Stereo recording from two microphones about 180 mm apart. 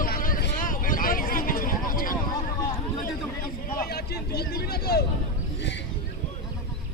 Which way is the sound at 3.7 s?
60° left (ahead or behind).